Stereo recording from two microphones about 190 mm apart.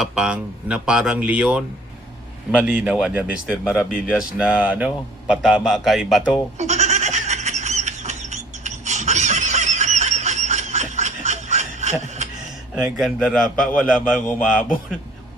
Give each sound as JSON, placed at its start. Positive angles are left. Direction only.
{"t": 0.0, "sound": "speech", "side_deg": -5}
{"t": 6.6, "sound": "goat", "side_deg": -35}
{"t": 12.7, "sound": "speech", "side_deg": -5}